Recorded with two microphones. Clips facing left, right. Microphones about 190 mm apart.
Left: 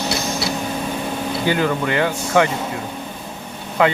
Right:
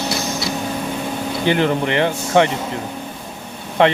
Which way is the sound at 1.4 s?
25° right (ahead or behind).